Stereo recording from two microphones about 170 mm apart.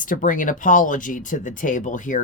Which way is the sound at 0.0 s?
50° left (ahead or behind).